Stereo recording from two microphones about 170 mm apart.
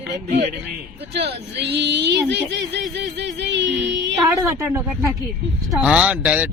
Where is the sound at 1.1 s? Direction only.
80° right.